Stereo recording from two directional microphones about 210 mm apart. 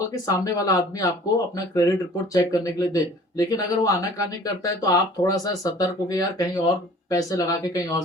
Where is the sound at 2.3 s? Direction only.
15° left (ahead or behind).